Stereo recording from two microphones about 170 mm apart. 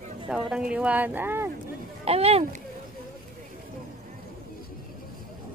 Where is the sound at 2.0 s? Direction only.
35° right (ahead or behind).